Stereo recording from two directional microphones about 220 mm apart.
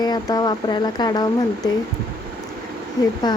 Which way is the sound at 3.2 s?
20° left (ahead or behind).